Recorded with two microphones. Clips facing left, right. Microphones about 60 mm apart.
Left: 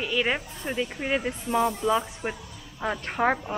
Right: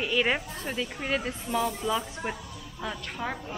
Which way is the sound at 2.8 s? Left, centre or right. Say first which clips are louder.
Left 9 dB; left.